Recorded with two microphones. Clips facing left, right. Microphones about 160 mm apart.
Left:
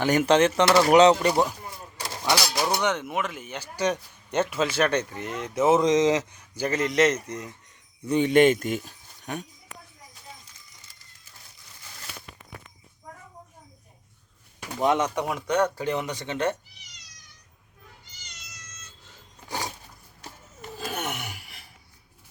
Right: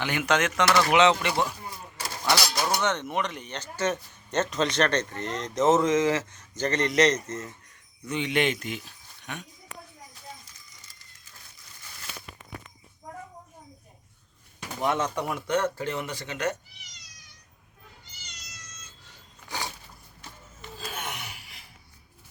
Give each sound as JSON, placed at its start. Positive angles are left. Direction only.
{"t": 0.0, "sound": "speech", "side_deg": 40}
{"t": 2.2, "sound": "speech", "side_deg": 10}
{"t": 8.0, "sound": "speech", "side_deg": 40}
{"t": 14.8, "sound": "speech", "side_deg": 15}
{"t": 20.2, "sound": "a sound", "side_deg": 50}